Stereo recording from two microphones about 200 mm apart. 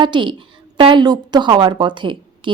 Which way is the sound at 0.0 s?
25° right (ahead or behind).